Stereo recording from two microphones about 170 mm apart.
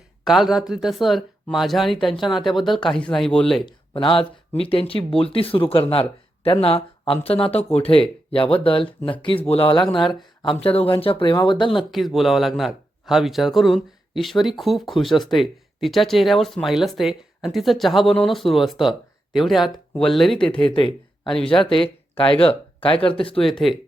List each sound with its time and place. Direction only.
0.3 s speech: centre (ahead or behind)
3.9 s speech: 30° left (ahead or behind)
11.8 s speech: centre (ahead or behind)
20.7 s speech: 30° left (ahead or behind)
23.4 s speech: centre (ahead or behind)